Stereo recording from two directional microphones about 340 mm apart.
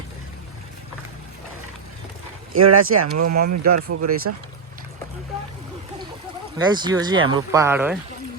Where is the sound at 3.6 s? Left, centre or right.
Right.